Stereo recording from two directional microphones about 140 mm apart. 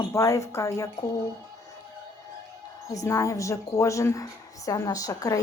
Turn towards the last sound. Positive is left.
turn(degrees=25)  # may be behind; listen again after turning